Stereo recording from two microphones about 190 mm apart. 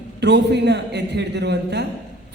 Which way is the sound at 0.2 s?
65° right (ahead or behind).